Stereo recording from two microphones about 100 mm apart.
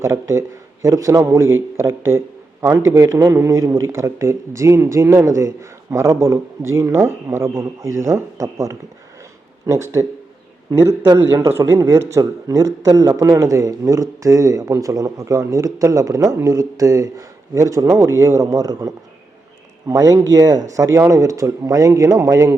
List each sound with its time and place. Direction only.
0.0 s a man's voice: 30° right (ahead or behind)